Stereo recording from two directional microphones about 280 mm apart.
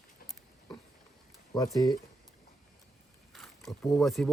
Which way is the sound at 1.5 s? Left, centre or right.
Centre.